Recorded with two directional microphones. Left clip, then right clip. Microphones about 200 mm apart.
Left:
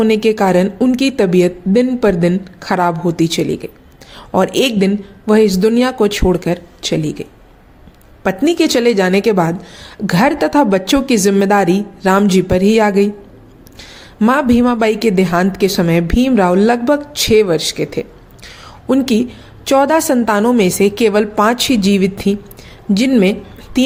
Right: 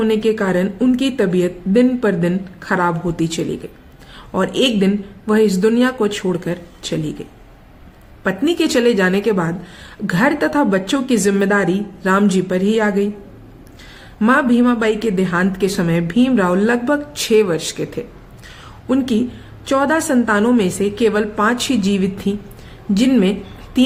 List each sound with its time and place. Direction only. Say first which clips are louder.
0.0 s a woman's voice: left 4 dB; 30° left (ahead or behind)
8.4 s a woman's voice: left 3 dB; 25° left (ahead or behind)
14.2 s a woman's voice: left 2 dB; 30° left (ahead or behind)
18.4 s a sound: left 4 dB; 30° left (ahead or behind)
19.6 s a woman's voice: left 5 dB; 30° left (ahead or behind)